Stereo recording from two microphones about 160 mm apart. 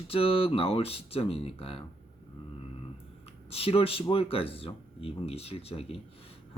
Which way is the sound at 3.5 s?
35° left (ahead or behind).